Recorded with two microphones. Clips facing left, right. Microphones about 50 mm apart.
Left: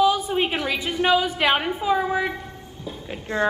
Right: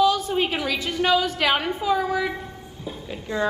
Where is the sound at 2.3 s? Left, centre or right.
Centre.